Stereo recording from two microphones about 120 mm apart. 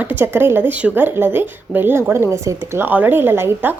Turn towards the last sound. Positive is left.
turn(degrees=-15)  # may be behind; listen again after turning